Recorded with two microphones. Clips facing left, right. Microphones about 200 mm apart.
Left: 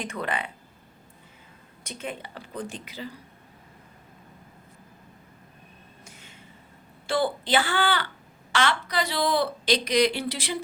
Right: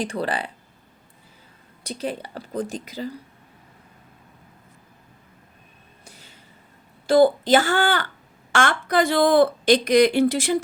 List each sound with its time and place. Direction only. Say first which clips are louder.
0.0 s a woman's voice: right 5 dB; 35° right (ahead or behind)
1.8 s a woman's voice: right 7 dB; 35° right (ahead or behind)
6.1 s a sound: right 4 dB; 35° right (ahead or behind)
7.1 s speech: right 9 dB; 40° right (ahead or behind)